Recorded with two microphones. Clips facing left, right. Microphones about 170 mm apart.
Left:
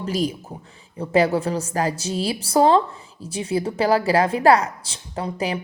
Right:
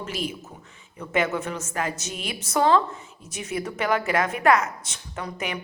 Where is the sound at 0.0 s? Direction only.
35° left (ahead or behind).